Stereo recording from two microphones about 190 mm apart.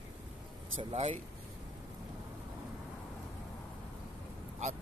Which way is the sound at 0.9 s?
35° right (ahead or behind).